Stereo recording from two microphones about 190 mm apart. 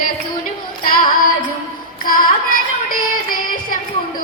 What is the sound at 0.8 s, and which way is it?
Child singing, 50° left (ahead or behind).